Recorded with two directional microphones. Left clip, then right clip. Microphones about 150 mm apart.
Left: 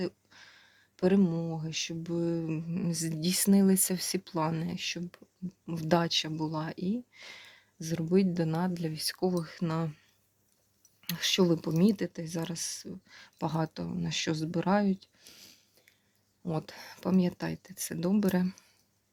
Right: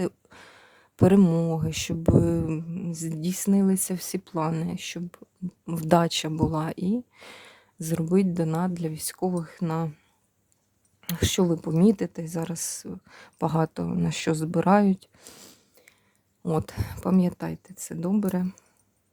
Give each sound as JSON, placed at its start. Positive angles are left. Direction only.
{"t": 0.0, "sound": "speech", "side_deg": -40}
{"t": 2.6, "sound": "speech", "side_deg": 0}
{"t": 2.9, "sound": "speech", "side_deg": -15}
{"t": 8.0, "sound": "speech", "side_deg": -30}
{"t": 11.0, "sound": "speech", "side_deg": -35}
{"t": 11.4, "sound": "speech", "side_deg": -20}
{"t": 11.8, "sound": "speech", "side_deg": -30}